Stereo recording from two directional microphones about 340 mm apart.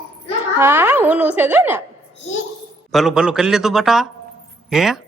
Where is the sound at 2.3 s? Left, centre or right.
Centre.